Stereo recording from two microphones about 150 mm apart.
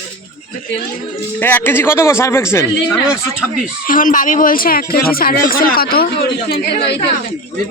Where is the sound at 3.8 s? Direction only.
65° left (ahead or behind); by 6.9 s 90° left.